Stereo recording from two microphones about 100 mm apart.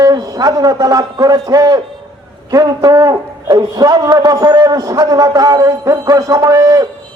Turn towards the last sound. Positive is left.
turn(degrees=-35)  # may be behind; listen again after turning